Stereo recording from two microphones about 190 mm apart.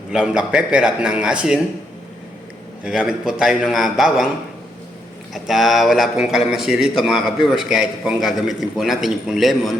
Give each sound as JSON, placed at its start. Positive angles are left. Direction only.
{"t": 0.1, "sound": "a man's voice", "side_deg": -5}
{"t": 2.8, "sound": "a man's voice", "side_deg": -5}
{"t": 5.3, "sound": "a man's voice", "side_deg": 0}